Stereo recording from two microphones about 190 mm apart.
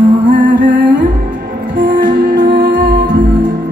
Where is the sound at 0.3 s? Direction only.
45° right (ahead or behind).